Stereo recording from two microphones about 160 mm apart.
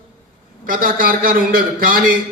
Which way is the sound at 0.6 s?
60° right (ahead or behind).